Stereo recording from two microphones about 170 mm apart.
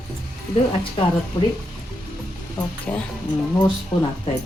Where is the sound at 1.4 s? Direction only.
25° left (ahead or behind).